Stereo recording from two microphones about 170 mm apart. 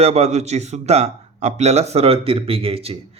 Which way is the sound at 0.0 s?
40° right (ahead or behind).